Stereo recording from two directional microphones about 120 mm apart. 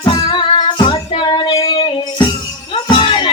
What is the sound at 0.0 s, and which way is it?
Music, 40° left (ahead or behind).